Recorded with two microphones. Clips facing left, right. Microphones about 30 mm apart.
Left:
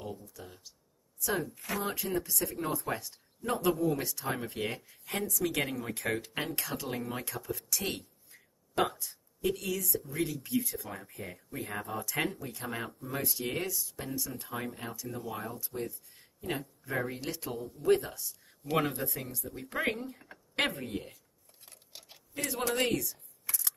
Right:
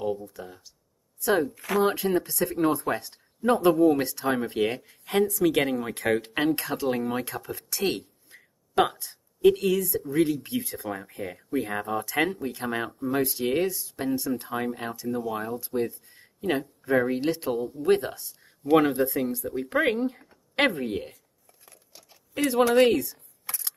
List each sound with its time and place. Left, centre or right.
0.4 s speech: centre
1.2 s speech: right
17.2 s speech: right
20.6 s speech: right
22.3 s speech: right